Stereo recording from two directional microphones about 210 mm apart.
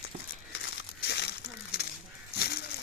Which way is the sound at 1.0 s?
50° left (ahead or behind).